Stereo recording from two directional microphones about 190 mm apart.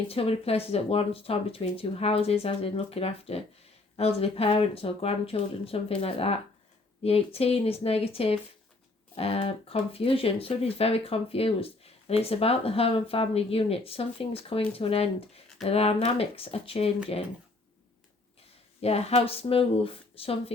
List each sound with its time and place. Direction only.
0.1 s speech: 30° left (ahead or behind)
18.8 s speech: 30° left (ahead or behind)